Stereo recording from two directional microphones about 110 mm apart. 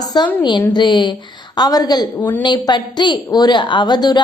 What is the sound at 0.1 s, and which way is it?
A woman's voice, 40° left (ahead or behind).